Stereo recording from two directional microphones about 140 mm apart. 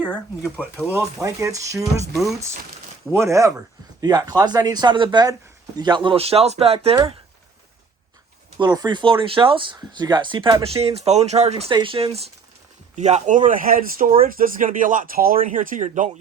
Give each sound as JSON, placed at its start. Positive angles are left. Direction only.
{"t": 0.6, "sound": "speech", "side_deg": -15}
{"t": 8.5, "sound": "speech", "side_deg": -30}
{"t": 11.7, "sound": "speech", "side_deg": -35}
{"t": 13.0, "sound": "speech", "side_deg": -55}